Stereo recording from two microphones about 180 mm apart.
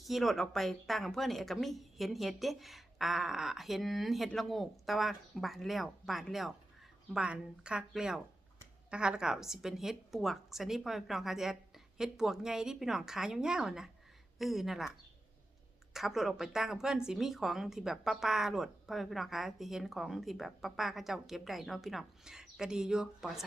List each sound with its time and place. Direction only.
0.0 s a woman's voice: centre (ahead or behind)